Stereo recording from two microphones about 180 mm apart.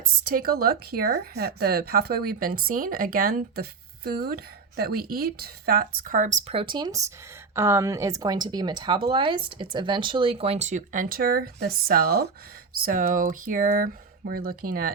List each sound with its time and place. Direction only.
0.0 s speech: 50° right (ahead or behind)
6.5 s speech: 30° right (ahead or behind); by 12.3 s 60° right (ahead or behind)
12.8 s speech: 50° right (ahead or behind)